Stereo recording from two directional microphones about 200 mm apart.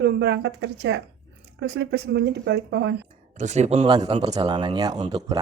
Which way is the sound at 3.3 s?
35° right (ahead or behind).